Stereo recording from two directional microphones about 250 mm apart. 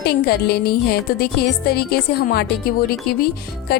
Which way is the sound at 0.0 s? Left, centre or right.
Left.